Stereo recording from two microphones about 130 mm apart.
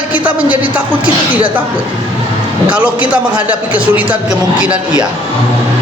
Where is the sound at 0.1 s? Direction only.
10° right (ahead or behind).